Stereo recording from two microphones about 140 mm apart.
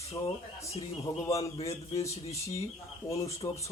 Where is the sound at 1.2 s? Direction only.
25° left (ahead or behind).